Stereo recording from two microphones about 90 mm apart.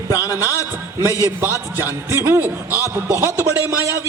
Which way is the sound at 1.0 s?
30° right (ahead or behind).